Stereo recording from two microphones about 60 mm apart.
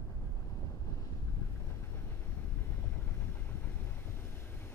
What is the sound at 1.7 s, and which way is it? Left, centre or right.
Vehicle, left.